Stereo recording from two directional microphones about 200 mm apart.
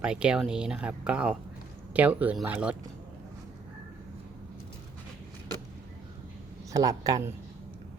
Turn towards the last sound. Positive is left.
turn(degrees=-15)  # may be behind; listen again after turning